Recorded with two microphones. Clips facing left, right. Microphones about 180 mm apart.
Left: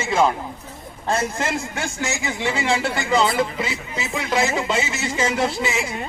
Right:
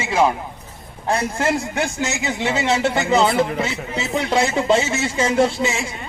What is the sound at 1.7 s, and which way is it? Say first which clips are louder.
Speech: right 4 dB; 20° right (ahead or behind).